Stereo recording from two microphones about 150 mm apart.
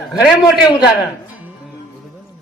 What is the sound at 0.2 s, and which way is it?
Speech, 5° right (ahead or behind).